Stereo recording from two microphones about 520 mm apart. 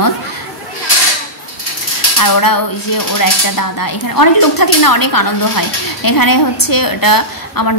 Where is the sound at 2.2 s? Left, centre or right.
Left.